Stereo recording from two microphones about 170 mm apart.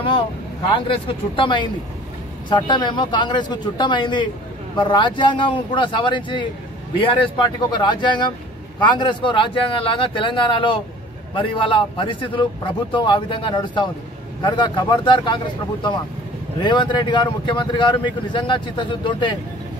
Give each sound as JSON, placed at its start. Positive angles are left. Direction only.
{"t": 0.7, "sound": "speech", "side_deg": 30}
{"t": 7.7, "sound": "speech", "side_deg": 25}